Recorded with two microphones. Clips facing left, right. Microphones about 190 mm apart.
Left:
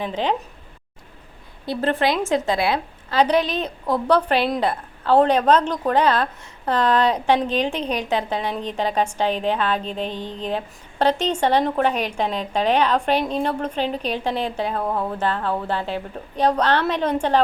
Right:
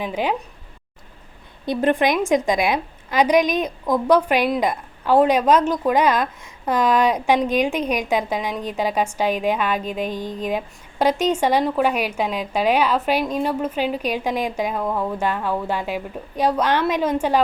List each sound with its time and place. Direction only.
0.0 s a woman's voice: 10° right (ahead or behind)
1.6 s a woman's voice: 15° right (ahead or behind)
14.8 s speech: 10° left (ahead or behind)
15.1 s a woman's voice: 10° right (ahead or behind)